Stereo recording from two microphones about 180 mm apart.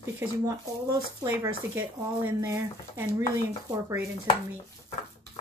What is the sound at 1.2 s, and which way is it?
Speech, 10° right (ahead or behind).